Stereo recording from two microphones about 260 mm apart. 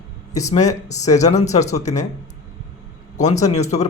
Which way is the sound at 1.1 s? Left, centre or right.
Left.